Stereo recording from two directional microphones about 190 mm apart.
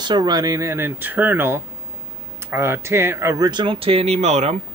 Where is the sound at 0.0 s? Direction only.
20° right (ahead or behind).